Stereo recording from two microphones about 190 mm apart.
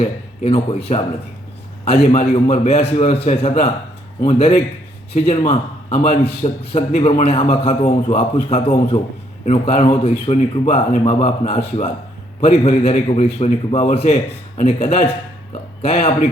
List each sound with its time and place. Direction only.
0.0 s a man's voice: 30° left (ahead or behind)
1.8 s a man's voice: 30° left (ahead or behind)